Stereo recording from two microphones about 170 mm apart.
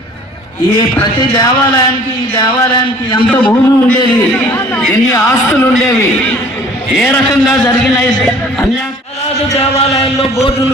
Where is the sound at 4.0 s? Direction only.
25° left (ahead or behind).